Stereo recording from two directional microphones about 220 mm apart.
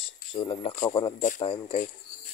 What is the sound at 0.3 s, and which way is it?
Speech, 25° left (ahead or behind).